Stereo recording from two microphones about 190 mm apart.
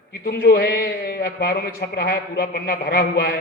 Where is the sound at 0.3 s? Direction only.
55° left (ahead or behind).